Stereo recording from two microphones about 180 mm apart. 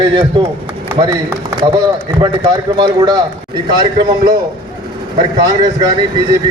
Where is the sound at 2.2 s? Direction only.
25° right (ahead or behind).